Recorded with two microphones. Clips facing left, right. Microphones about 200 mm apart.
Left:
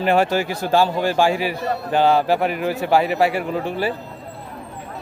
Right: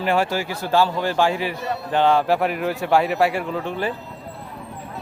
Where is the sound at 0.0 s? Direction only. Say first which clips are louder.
Left 3 dB; 20° left (ahead or behind).